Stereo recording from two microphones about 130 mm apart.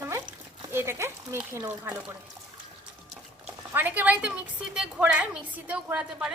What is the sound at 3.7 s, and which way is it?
A woman's voice, 15° right (ahead or behind).